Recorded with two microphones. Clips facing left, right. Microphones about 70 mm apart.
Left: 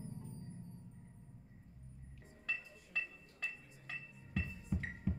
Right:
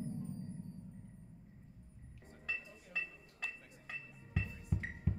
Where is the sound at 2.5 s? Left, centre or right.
Centre.